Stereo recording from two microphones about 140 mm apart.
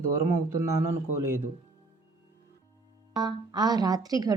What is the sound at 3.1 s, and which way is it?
A woman's voice, 30° right (ahead or behind).